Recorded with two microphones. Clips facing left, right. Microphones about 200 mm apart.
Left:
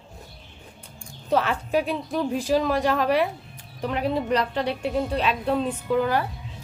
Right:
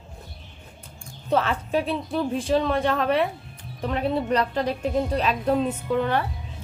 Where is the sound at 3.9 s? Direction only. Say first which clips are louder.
Even; 35° right (ahead or behind).